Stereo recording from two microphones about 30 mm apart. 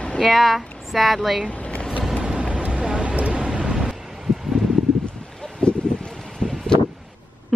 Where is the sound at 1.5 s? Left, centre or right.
Left.